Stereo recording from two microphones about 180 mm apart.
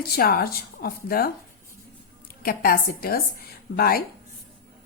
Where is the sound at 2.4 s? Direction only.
55° left (ahead or behind).